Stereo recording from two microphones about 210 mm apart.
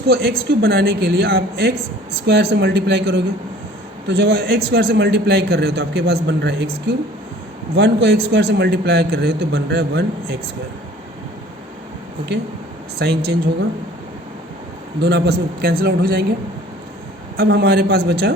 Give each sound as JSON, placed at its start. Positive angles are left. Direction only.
{"t": 0.1, "sound": "a man's voice", "side_deg": -45}
{"t": 13.0, "sound": "a man's voice", "side_deg": -50}
{"t": 15.0, "sound": "a man's voice", "side_deg": -55}
{"t": 17.3, "sound": "a man's voice", "side_deg": -50}